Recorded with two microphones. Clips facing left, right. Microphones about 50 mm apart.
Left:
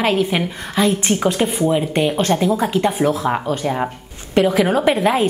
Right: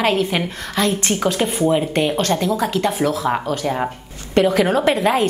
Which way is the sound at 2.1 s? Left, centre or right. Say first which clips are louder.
Left 2 dB; centre.